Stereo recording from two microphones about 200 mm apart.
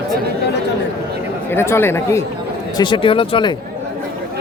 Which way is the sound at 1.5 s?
10° left (ahead or behind).